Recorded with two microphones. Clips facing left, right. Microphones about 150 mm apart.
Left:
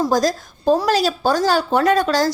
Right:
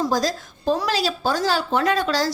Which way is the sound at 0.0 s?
45° left (ahead or behind).